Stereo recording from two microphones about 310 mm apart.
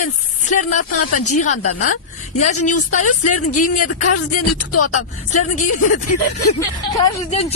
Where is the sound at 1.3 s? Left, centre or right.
Left.